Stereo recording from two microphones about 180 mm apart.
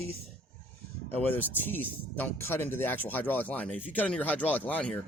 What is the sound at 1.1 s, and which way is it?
Speech, 10° left (ahead or behind).